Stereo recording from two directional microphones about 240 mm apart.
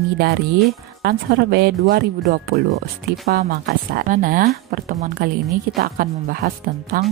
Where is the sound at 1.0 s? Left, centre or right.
Right.